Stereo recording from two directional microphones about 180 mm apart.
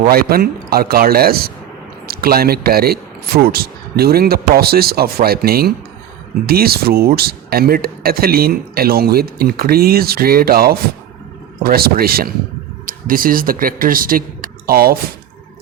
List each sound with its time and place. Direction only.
0.0 s speech: 55° right (ahead or behind)